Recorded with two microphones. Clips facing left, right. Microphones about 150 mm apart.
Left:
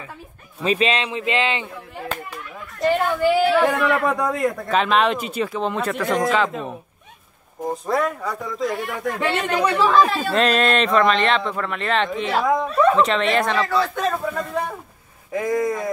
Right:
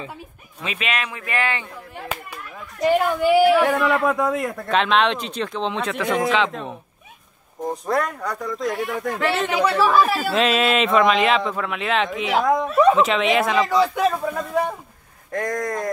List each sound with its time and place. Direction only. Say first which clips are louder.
0.7 s speech: left 7 dB; 30° left (ahead or behind)
2.8 s a man's voice: right 1 dB; 15° right (ahead or behind)
13.6 s a man's voice: right 3 dB; 15° right (ahead or behind); by 15.9 s 5° left (ahead or behind)